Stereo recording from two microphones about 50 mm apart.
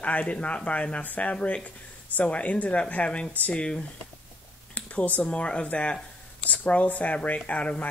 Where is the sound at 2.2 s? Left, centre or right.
Left.